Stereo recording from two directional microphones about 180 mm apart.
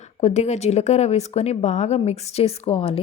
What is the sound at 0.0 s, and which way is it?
Speech, 40° left (ahead or behind).